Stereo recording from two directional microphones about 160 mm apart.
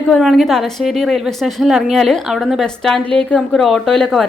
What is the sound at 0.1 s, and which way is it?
A woman's voice, centre (ahead or behind).